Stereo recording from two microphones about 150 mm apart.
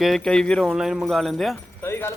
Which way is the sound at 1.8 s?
15° left (ahead or behind).